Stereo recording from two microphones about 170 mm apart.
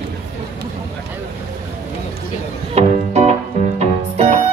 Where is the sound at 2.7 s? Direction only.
40° right (ahead or behind).